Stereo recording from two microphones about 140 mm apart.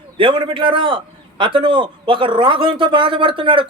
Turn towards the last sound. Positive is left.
turn(degrees=-35)  # may be behind; listen again after turning